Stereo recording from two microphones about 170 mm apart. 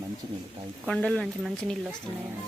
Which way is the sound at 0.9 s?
5° left (ahead or behind).